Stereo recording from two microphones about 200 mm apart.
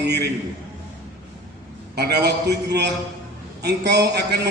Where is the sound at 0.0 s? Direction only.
55° right (ahead or behind).